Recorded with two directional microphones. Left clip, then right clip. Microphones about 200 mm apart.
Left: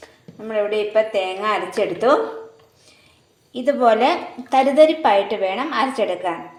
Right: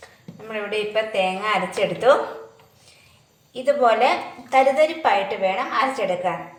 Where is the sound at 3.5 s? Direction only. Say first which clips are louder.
Left 2 dB; 45° left (ahead or behind).